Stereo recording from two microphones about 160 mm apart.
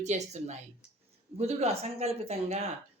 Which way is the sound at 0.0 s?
45° right (ahead or behind).